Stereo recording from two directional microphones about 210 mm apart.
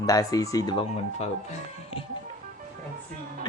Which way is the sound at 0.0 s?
15° left (ahead or behind).